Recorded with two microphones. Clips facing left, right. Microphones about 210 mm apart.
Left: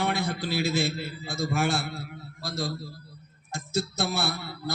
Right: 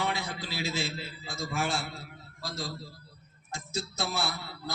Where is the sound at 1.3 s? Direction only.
65° left (ahead or behind).